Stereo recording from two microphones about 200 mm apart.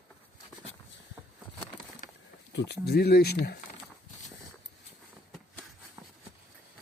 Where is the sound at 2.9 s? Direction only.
55° left (ahead or behind).